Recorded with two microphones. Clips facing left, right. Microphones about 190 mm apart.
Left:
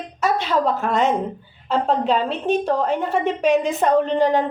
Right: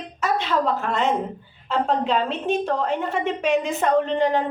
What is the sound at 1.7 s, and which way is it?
A woman's voice, 35° left (ahead or behind).